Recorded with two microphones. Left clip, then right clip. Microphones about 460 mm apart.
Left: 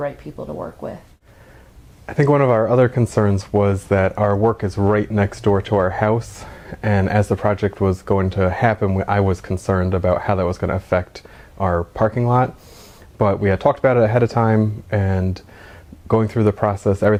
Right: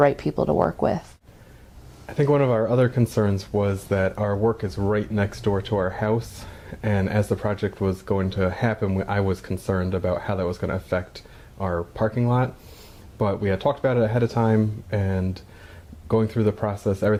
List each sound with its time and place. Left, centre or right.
0.0 s speech: right
2.0 s speech: left